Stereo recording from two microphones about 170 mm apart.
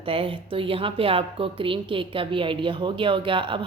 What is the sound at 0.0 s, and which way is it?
A woman's voice, 30° right (ahead or behind).